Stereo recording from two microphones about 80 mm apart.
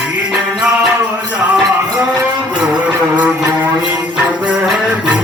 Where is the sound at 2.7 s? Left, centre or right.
Centre.